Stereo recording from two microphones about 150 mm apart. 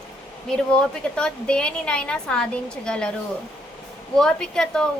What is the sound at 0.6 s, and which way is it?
A woman's voice, 5° left (ahead or behind).